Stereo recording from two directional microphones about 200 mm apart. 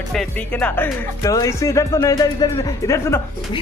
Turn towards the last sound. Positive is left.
turn(degrees=15)  # may be behind; listen again after turning